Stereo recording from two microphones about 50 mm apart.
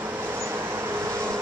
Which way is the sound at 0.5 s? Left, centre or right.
Right.